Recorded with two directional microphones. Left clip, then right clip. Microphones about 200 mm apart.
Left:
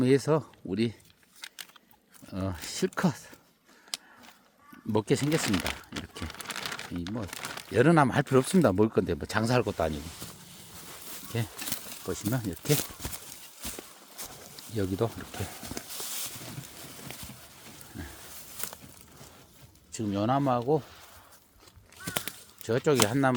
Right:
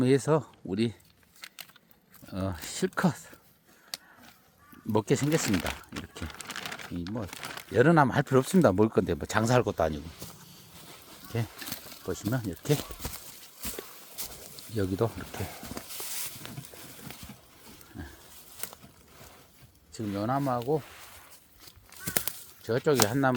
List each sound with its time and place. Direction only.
0.0 s speech: centre (ahead or behind)
1.4 s a sound: 5° right (ahead or behind)
2.3 s speech: centre (ahead or behind)
4.9 s speech: centre (ahead or behind)
6.1 s crumpling: 5° right (ahead or behind)
7.3 s speech: 10° right (ahead or behind)
7.7 s speech: 5° left (ahead or behind)
11.3 s speech: 5° left (ahead or behind)
13.0 s horse: 20° right (ahead or behind)
14.2 s a sound: 35° right (ahead or behind)
14.5 s speech: centre (ahead or behind)
18.6 s a sound: 10° left (ahead or behind)
19.9 s speech: 20° left (ahead or behind)
22.6 s speech: 15° left (ahead or behind)